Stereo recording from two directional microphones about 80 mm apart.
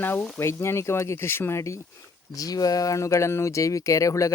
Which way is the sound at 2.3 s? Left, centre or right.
Left.